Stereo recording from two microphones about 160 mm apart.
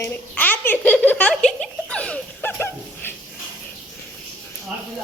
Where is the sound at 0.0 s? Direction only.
10° left (ahead or behind).